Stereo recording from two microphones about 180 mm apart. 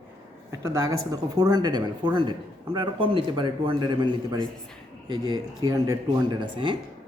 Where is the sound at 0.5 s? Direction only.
15° right (ahead or behind).